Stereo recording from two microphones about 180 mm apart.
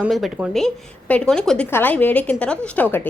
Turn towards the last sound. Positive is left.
turn(degrees=10)  # may be behind; listen again after turning